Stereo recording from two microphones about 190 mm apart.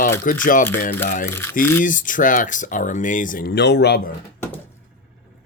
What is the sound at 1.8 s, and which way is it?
Speech, 45° left (ahead or behind).